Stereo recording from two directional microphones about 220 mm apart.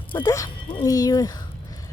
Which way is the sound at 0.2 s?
15° left (ahead or behind).